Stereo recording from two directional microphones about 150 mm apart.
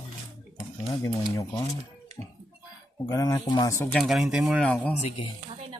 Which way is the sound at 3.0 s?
25° left (ahead or behind).